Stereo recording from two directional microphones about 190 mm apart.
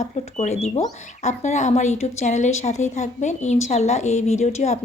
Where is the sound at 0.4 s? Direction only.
35° left (ahead or behind).